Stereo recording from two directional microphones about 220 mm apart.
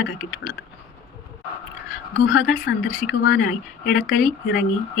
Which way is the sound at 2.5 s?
50° left (ahead or behind).